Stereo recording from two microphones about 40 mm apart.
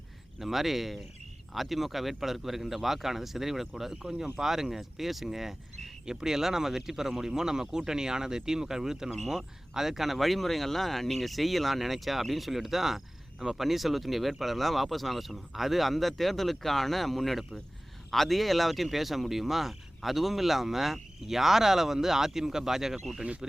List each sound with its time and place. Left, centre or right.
0.3 s speech: centre
23.4 s speech: centre